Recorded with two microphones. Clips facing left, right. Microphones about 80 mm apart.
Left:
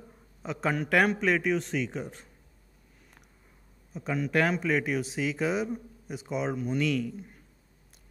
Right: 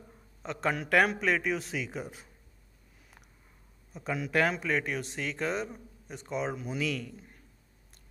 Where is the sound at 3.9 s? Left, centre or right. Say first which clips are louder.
Left 2 dB; centre.